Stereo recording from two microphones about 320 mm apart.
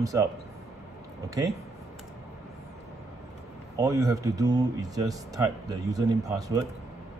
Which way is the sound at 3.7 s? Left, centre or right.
Centre.